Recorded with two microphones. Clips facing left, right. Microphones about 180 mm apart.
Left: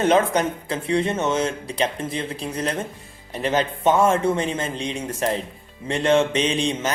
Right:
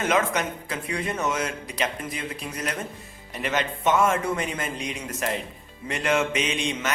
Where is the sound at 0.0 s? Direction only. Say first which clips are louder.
Left 6 dB; 30° left (ahead or behind).